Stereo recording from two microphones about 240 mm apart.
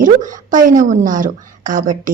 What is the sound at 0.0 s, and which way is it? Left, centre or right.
A woman's voice, right.